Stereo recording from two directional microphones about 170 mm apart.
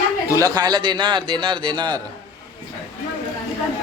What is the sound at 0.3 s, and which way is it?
A man's voice, 20° right (ahead or behind).